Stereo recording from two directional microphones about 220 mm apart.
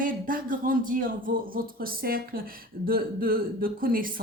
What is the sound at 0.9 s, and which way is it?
A woman's voice, 40° right (ahead or behind).